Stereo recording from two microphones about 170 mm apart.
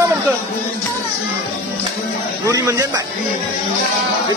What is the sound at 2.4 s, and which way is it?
Speech, 20° right (ahead or behind).